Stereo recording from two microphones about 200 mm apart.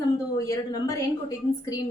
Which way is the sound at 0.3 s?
15° left (ahead or behind).